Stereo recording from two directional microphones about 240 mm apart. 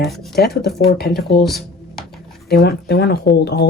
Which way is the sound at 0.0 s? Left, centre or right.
Centre.